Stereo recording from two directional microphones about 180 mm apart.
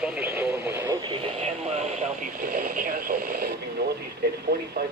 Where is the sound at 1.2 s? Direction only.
35° right (ahead or behind).